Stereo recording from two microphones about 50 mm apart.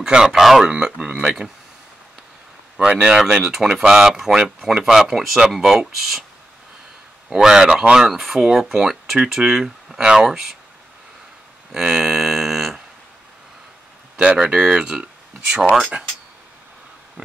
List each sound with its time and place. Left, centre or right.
0.0 s speech: centre
0.7 s speech: centre
2.8 s speech: centre
3.2 s speech: centre
7.2 s speech: centre
11.7 s speech: centre
14.2 s speech: centre